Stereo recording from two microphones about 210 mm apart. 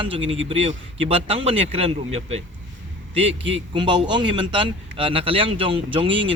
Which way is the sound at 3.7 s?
20° right (ahead or behind).